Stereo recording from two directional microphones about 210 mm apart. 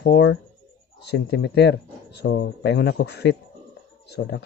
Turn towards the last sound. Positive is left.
turn(degrees=55)  # may be behind; listen again after turning